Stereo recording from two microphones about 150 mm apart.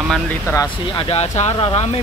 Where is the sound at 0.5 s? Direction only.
20° left (ahead or behind).